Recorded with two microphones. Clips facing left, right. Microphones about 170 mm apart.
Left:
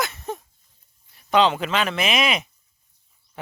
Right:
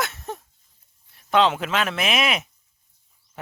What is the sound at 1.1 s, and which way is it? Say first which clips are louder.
Speech: left 1 dB; centre (ahead or behind).